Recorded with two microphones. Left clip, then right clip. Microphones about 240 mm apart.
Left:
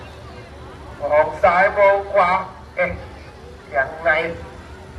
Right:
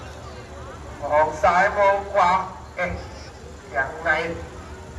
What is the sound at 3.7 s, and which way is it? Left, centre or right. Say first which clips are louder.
Speech: left 4 dB; centre.